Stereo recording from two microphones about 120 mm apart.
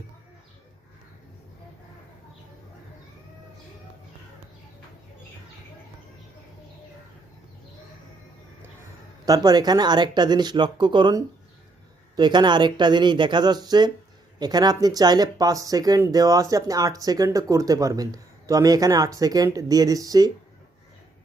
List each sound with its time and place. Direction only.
9.2 s speech: 30° right (ahead or behind)